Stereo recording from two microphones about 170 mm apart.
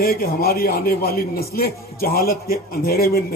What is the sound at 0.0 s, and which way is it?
A man's voice, 60° left (ahead or behind).